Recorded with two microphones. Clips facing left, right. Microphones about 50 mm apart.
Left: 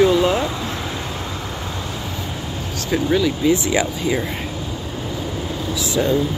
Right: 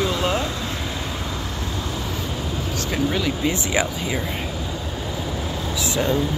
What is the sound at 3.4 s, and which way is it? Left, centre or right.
Speech, right.